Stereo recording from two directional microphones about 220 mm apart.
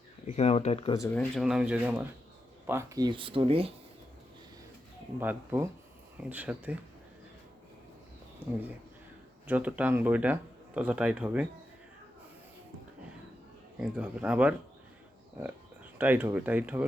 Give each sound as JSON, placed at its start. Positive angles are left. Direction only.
{"t": 0.3, "sound": "speech", "side_deg": 30}
{"t": 0.9, "sound": "speech", "side_deg": 10}
{"t": 1.4, "sound": "speech", "side_deg": -5}
{"t": 5.2, "sound": "speech", "side_deg": -10}
{"t": 9.5, "sound": "speech", "side_deg": -5}
{"t": 13.7, "sound": "speech", "side_deg": -5}